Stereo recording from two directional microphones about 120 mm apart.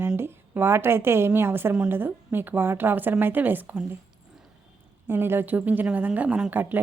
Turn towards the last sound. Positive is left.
turn(degrees=-15)  # may be behind; listen again after turning